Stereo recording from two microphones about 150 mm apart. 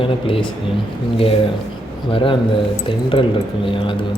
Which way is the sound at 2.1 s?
35° left (ahead or behind).